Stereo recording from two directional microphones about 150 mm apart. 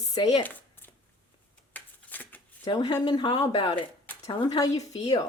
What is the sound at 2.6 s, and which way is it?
Speech, 30° left (ahead or behind).